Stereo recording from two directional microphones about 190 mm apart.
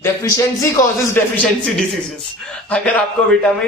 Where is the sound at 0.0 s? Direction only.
15° left (ahead or behind).